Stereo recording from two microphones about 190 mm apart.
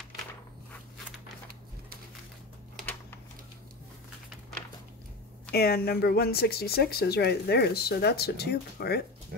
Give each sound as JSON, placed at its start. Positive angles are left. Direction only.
{"t": 5.5, "sound": "speech", "side_deg": 55}